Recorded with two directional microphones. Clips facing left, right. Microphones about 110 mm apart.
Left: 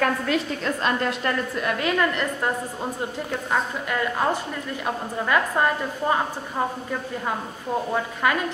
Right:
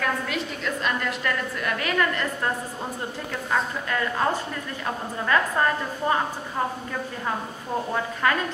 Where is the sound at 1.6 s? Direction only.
20° left (ahead or behind).